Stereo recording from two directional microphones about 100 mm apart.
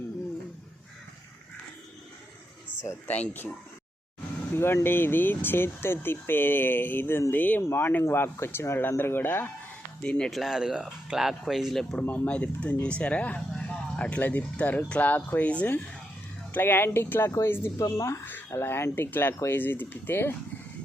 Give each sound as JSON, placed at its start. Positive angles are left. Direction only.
{"t": 3.1, "sound": "speech", "side_deg": 20}
{"t": 4.5, "sound": "speech", "side_deg": 25}
{"t": 10.0, "sound": "speech", "side_deg": 10}
{"t": 12.0, "sound": "speech", "side_deg": 15}